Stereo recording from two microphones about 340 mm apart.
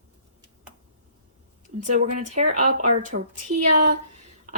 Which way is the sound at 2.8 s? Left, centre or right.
Right.